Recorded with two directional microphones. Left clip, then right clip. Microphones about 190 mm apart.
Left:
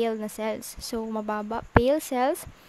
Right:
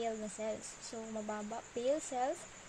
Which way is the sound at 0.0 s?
50° left (ahead or behind).